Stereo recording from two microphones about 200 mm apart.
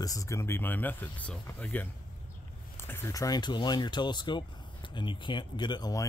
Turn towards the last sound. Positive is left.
turn(degrees=20)  # may be behind; listen again after turning